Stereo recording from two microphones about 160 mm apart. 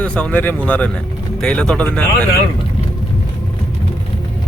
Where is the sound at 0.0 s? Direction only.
5° left (ahead or behind).